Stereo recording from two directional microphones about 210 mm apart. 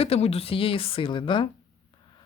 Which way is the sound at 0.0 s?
30° left (ahead or behind).